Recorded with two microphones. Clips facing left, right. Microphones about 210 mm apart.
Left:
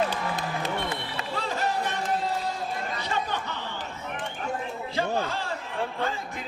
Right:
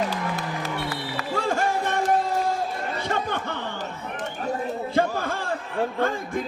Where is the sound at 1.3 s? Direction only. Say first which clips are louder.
Right 5 dB; 50° right (ahead or behind).